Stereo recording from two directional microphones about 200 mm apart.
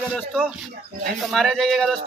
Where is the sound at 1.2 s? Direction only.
Centre (ahead or behind).